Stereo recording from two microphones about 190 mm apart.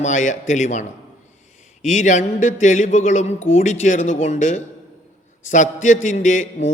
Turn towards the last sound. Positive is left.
turn(degrees=40)  # may be behind; listen again after turning